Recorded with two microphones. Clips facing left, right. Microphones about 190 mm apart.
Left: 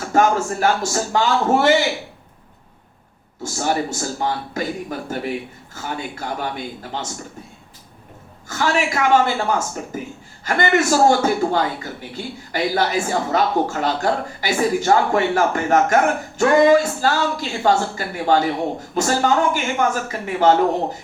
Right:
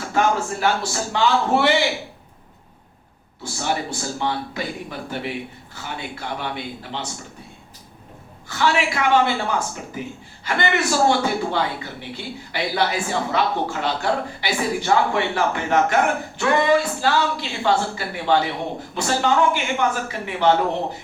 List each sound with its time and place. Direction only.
0.1 s a man's voice: 45° left (ahead or behind)
3.4 s a man's voice: 45° left (ahead or behind)
8.4 s a man's voice: 45° left (ahead or behind)